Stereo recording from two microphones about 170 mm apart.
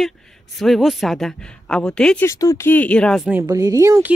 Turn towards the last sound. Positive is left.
turn(degrees=-20)  # may be behind; listen again after turning